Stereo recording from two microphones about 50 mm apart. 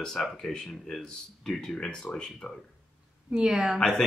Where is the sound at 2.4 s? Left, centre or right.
Left.